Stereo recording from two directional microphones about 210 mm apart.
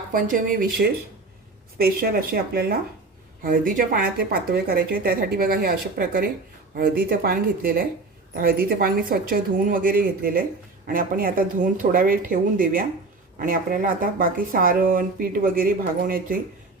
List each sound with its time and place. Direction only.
0.1 s speech: 40° right (ahead or behind)
1.8 s speech: 45° right (ahead or behind)